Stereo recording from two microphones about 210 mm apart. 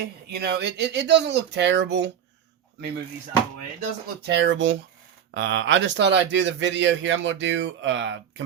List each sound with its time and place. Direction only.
0.0 s speech: 50° right (ahead or behind)
4.3 s speech: 55° right (ahead or behind)